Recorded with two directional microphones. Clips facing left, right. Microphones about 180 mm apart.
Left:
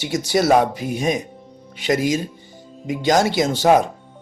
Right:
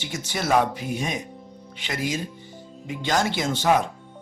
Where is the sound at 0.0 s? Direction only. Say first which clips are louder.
Left 10 dB; 40° left (ahead or behind).